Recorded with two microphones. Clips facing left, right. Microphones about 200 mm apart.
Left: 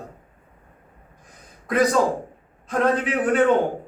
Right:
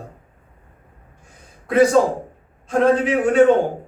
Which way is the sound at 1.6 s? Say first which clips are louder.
Right 5 dB; 30° right (ahead or behind).